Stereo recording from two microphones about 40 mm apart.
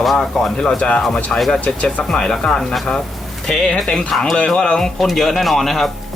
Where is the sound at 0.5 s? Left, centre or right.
Left.